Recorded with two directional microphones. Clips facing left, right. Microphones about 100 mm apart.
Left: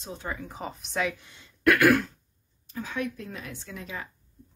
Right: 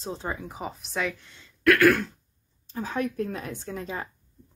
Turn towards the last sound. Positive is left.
turn(degrees=-35)  # may be behind; listen again after turning